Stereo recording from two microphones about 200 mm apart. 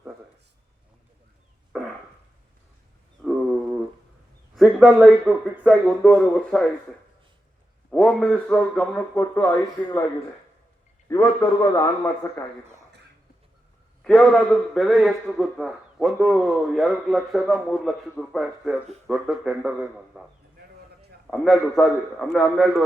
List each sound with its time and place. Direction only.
1.7 s a sound: 5° right (ahead or behind)
3.2 s a sound: 5° right (ahead or behind)
4.5 s a man's voice: centre (ahead or behind)
7.9 s a man's voice: 5° left (ahead or behind)
11.1 s a man's voice: 10° left (ahead or behind)
14.0 s a man's voice: 5° left (ahead or behind)
21.2 s a man's voice: centre (ahead or behind)